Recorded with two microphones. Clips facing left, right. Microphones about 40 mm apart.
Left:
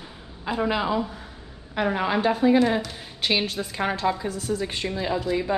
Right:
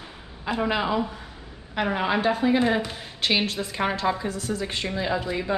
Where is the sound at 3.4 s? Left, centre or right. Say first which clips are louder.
Even; centre.